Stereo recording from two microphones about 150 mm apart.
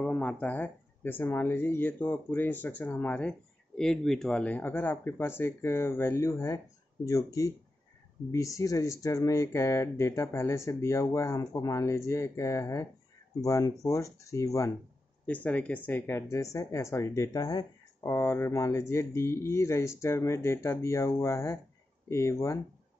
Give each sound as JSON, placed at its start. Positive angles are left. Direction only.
{"t": 0.0, "sound": "speech", "side_deg": 10}
{"t": 15.2, "sound": "speech", "side_deg": 10}